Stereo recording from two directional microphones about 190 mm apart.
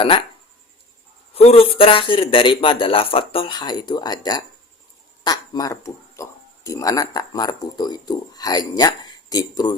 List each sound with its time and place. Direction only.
1.3 s speech: 30° left (ahead or behind)